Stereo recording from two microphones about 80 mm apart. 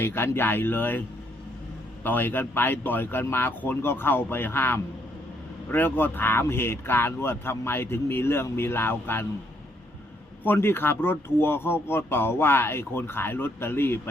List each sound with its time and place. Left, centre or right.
0.0 s speech: left
2.0 s speech: left
10.4 s speech: left